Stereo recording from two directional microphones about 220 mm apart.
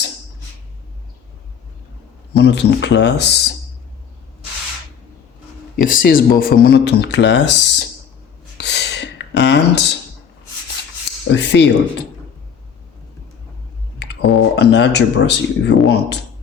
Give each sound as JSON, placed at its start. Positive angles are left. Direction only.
{"t": 2.3, "sound": "speech", "side_deg": 50}
{"t": 5.7, "sound": "speech", "side_deg": 40}
{"t": 8.5, "sound": "rub", "side_deg": 50}
{"t": 11.3, "sound": "speech", "side_deg": 50}
{"t": 14.0, "sound": "speech", "side_deg": 50}